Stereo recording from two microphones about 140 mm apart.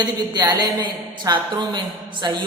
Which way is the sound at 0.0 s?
30° right (ahead or behind).